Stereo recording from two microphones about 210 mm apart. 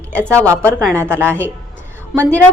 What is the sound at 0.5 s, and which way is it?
Speech, 5° left (ahead or behind).